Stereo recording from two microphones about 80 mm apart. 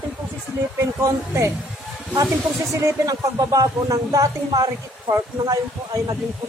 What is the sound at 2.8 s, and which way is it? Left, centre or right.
Speech, right.